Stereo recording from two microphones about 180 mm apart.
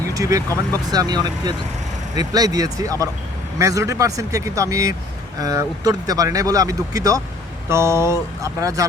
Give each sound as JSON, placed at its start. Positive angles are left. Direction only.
{"t": 0.1, "sound": "speech", "side_deg": -20}